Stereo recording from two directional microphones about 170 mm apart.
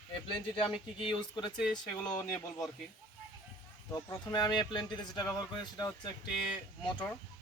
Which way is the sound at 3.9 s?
20° left (ahead or behind).